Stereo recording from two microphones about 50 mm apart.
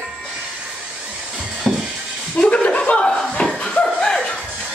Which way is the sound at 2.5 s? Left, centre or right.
Left.